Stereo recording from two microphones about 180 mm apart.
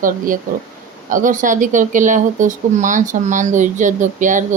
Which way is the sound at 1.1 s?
45° right (ahead or behind).